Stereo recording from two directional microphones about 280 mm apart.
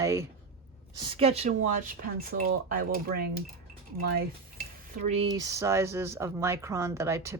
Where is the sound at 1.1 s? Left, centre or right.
Right.